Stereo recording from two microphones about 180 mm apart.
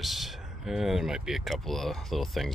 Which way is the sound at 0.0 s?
Centre (ahead or behind).